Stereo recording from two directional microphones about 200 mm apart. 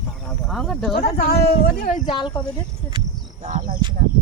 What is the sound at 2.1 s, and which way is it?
Speech, 25° left (ahead or behind).